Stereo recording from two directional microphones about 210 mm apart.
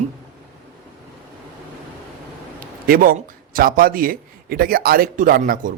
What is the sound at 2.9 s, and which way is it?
A man's voice, 40° right (ahead or behind).